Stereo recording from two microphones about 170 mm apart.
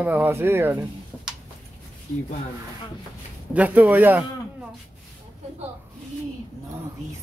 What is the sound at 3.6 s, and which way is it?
Speech, 10° right (ahead or behind).